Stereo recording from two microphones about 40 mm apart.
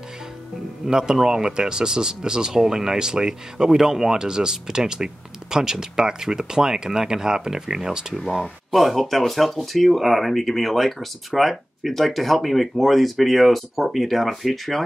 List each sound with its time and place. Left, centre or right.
0.8 s speech: centre
8.3 s speech: centre